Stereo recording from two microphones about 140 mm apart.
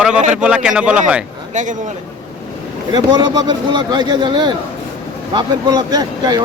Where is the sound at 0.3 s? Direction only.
5° right (ahead or behind).